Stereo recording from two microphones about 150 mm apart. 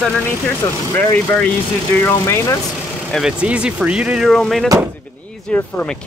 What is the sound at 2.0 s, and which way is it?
Speech, 15° left (ahead or behind).